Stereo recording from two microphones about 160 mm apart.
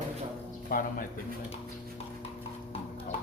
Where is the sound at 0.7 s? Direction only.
60° left (ahead or behind).